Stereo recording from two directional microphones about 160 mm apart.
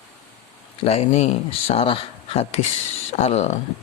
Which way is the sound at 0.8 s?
40° left (ahead or behind).